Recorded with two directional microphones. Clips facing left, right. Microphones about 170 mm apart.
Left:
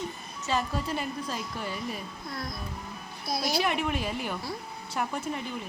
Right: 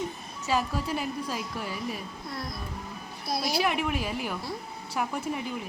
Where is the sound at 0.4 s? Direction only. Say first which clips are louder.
Right 1 dB; 5° right (ahead or behind).